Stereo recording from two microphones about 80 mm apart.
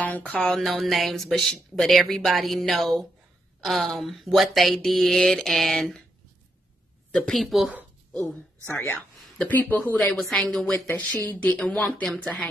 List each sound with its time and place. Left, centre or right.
0.0 s a sound: centre
0.4 s speech: centre
7.2 s speech: centre
8.7 s speech: centre
9.9 s speech: centre
10.9 s speech: left